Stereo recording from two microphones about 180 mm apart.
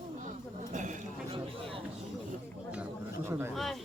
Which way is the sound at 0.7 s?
45° right (ahead or behind).